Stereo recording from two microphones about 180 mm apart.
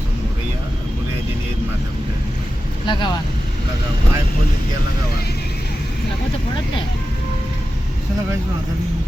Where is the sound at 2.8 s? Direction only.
25° left (ahead or behind).